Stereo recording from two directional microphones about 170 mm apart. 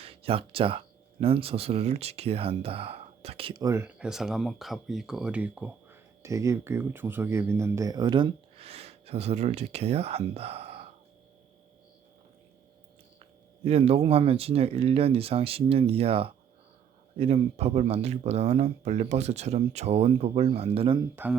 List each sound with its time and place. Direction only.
0.0 s speech: 35° right (ahead or behind)
3.6 s speech: 15° right (ahead or behind)
3.9 s speech: 5° right (ahead or behind); by 10.8 s 35° right (ahead or behind)
13.7 s speech: 35° right (ahead or behind)
21.2 s speech: 10° right (ahead or behind)